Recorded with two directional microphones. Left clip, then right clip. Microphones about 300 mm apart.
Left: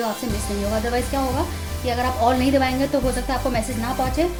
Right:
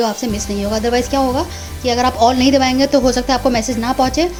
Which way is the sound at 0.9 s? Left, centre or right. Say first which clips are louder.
Right 8 dB; right.